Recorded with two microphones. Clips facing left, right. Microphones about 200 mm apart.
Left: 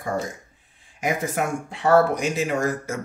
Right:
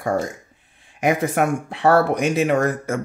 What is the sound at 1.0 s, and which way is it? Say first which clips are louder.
Speech: right 6 dB; 65° right (ahead or behind).